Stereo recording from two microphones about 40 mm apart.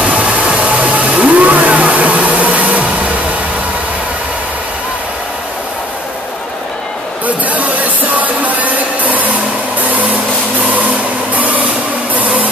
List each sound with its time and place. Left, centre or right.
0.1 s vehicle: right
7.2 s music: right
9.8 s a sound: right